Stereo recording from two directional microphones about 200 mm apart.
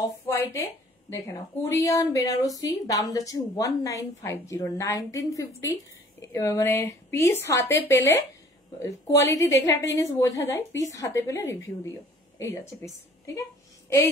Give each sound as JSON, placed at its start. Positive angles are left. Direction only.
{"t": 0.3, "sound": "a woman's voice", "side_deg": 15}